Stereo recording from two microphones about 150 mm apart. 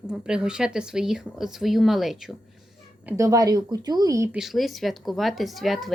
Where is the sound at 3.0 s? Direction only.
20° right (ahead or behind).